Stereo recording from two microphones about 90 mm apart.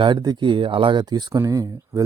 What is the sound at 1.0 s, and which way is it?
Speech, 50° right (ahead or behind).